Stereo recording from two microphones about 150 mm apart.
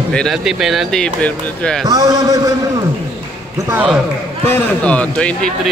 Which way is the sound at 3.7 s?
10° right (ahead or behind).